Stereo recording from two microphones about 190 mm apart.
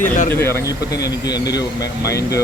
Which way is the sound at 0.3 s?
10° left (ahead or behind).